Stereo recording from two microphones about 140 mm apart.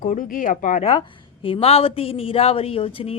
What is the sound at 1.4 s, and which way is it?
Speech, 40° left (ahead or behind).